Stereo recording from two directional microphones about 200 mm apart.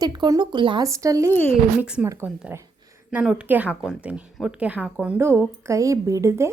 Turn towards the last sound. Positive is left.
turn(degrees=-15)  # may be behind; listen again after turning